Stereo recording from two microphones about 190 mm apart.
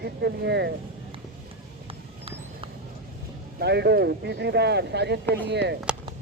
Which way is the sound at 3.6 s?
60° right (ahead or behind).